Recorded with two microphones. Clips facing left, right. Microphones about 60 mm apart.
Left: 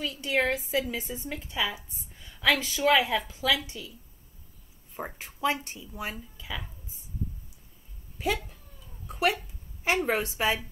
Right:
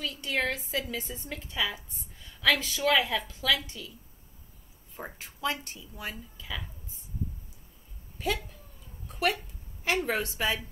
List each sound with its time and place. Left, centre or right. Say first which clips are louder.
0.0 s a woman's voice: left 3 dB; centre
4.9 s speech: left 4 dB; left
9.0 s a sound: left 2 dB; centre
9.8 s a woman's voice: left 2 dB; centre